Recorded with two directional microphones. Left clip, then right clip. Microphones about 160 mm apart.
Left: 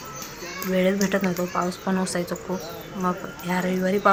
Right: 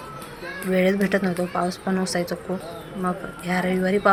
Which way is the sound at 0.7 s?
10° right (ahead or behind).